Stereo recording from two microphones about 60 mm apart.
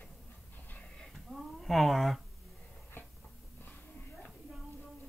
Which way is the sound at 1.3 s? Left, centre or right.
Centre.